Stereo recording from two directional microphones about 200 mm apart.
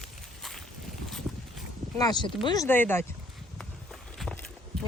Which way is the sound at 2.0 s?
20° left (ahead or behind).